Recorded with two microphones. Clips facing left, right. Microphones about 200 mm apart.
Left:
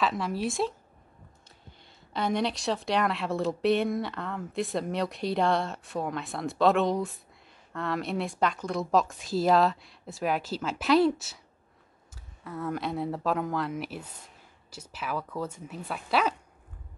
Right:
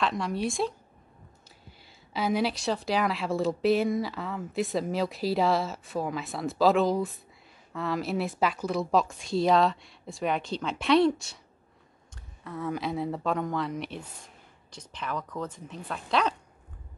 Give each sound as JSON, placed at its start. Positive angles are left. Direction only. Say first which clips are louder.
{"t": 0.0, "sound": "speech", "louder": "even", "side_deg": 0}
{"t": 2.1, "sound": "speech", "louder": "right 1 dB", "side_deg": -5}